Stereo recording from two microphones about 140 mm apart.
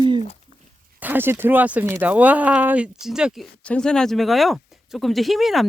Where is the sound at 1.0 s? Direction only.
15° right (ahead or behind).